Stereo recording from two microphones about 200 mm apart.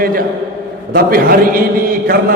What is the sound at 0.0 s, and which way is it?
A man's voice, 45° right (ahead or behind).